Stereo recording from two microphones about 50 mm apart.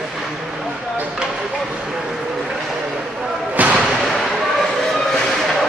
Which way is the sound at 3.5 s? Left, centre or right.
Right.